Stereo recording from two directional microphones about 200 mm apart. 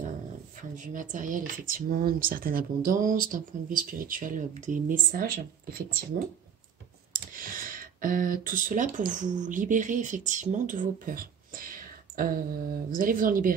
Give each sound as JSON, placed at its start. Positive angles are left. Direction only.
{"t": 0.7, "sound": "speech", "side_deg": -40}